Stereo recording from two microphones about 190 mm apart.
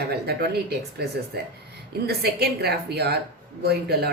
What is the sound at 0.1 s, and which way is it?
Speech, 55° right (ahead or behind).